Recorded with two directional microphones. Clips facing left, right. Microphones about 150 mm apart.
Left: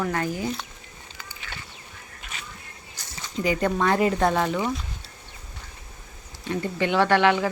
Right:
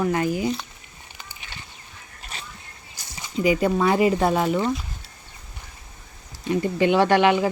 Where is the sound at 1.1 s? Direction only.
20° right (ahead or behind).